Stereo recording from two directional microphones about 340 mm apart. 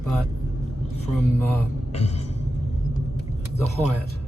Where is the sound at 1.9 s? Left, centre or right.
Centre.